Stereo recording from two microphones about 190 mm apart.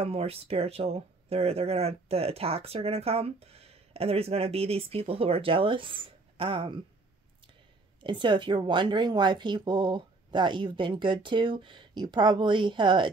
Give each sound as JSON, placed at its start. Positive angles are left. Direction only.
{"t": 0.0, "sound": "speech", "side_deg": -30}
{"t": 8.0, "sound": "a woman's voice", "side_deg": -25}